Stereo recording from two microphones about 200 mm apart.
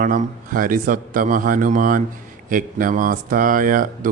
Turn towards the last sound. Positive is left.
turn(degrees=-45)  # may be behind; listen again after turning